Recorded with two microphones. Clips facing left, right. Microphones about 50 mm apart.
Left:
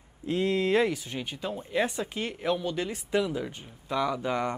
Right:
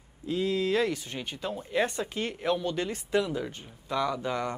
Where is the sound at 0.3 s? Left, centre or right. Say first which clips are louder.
Left 2 dB; left.